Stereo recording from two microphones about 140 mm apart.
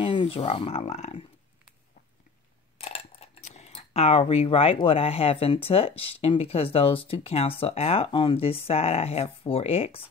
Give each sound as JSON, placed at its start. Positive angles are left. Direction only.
{"t": 0.0, "sound": "speech", "side_deg": 35}
{"t": 2.8, "sound": "speech", "side_deg": 45}